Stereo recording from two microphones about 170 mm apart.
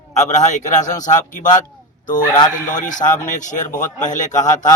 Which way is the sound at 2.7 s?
50° left (ahead or behind).